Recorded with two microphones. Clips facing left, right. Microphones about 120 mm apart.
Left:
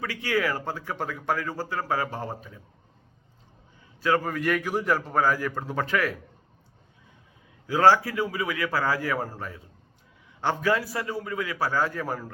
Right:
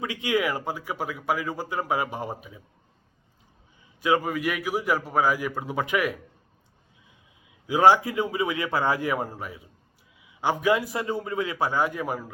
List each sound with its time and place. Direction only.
0.0 s speech: 20° right (ahead or behind)
4.0 s speech: 15° right (ahead or behind)
7.7 s a man's voice: 15° right (ahead or behind)